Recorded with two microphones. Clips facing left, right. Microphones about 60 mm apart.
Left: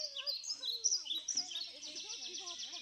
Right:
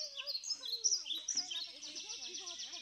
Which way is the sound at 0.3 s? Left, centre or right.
Right.